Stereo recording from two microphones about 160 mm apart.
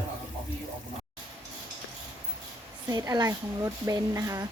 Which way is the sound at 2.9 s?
25° right (ahead or behind).